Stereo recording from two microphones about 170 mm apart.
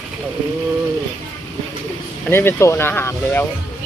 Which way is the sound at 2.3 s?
15° left (ahead or behind).